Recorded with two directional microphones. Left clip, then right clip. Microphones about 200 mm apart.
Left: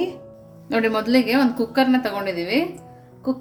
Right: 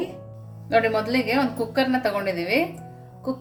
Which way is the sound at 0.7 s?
20° left (ahead or behind).